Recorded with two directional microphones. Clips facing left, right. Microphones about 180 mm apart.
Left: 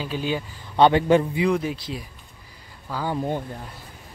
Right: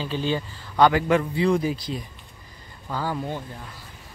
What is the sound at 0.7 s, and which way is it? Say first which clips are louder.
Speech: left 2 dB; 25° left (ahead or behind).